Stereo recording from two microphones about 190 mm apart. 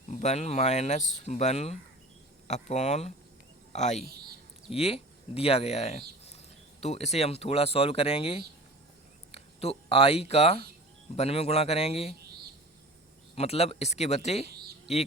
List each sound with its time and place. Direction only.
0.1 s speech: 35° left (ahead or behind)
13.3 s speech: 35° left (ahead or behind)